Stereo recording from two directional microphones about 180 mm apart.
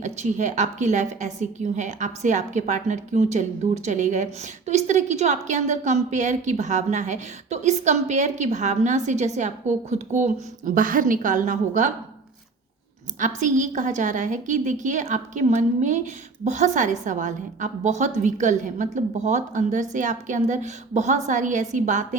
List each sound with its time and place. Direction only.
0.0 s a woman's voice: 40° right (ahead or behind)
13.1 s a woman's voice: 45° right (ahead or behind)